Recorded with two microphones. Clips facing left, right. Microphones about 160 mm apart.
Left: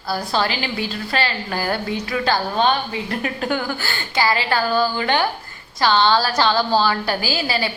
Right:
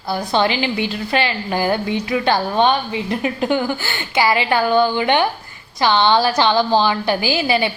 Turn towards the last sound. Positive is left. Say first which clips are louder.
# right 5 dB
turn(degrees=-20)  # may be behind; listen again after turning